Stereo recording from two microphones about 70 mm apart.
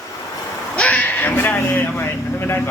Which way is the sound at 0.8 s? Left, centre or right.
Left.